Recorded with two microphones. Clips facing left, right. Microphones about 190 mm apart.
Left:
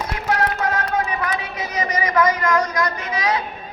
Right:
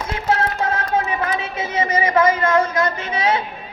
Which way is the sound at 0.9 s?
25° right (ahead or behind).